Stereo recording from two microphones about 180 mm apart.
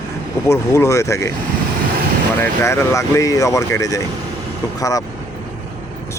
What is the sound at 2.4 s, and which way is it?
Speech, 15° left (ahead or behind).